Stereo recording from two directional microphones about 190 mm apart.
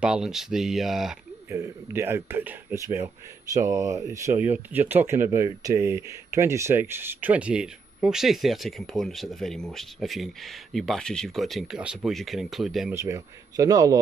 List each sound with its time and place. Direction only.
0.0 s speech: 5° right (ahead or behind)
1.5 s speech: 15° right (ahead or behind)
12.9 s speech: 15° right (ahead or behind)